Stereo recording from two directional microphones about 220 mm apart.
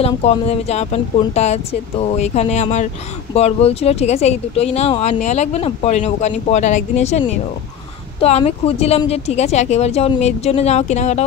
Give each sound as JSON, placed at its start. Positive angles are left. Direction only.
{"t": 0.0, "sound": "speech", "side_deg": 30}